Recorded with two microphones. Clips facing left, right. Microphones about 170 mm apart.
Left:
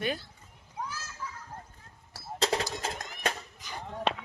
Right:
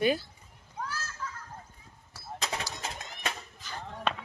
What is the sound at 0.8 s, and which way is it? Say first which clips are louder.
Children playing: right 1 dB; 15° left (ahead or behind).